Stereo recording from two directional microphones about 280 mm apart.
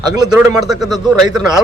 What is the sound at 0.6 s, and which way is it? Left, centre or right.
Speech, centre.